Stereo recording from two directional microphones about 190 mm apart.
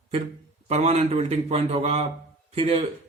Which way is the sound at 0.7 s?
35° right (ahead or behind).